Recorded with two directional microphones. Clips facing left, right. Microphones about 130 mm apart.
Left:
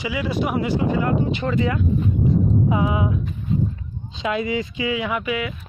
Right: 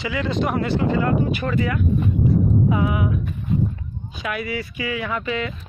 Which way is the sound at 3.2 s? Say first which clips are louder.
Even; 60° right (ahead or behind).